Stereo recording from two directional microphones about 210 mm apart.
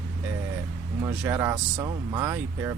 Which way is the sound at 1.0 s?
15° right (ahead or behind).